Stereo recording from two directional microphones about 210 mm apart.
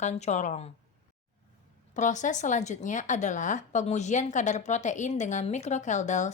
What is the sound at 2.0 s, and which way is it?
Speech, 35° left (ahead or behind).